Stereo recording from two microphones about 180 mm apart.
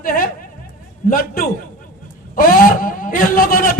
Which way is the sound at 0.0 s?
50° left (ahead or behind).